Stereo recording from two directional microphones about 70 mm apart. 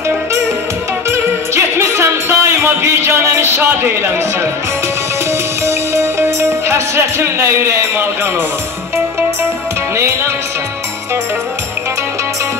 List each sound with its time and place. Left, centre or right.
1.1 s music: right
5.7 s music: right